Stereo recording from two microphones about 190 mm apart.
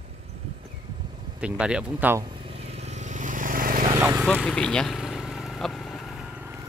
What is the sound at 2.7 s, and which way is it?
Vehicle, 35° right (ahead or behind).